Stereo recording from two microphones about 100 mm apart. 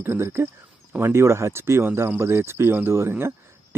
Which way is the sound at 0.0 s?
20° right (ahead or behind).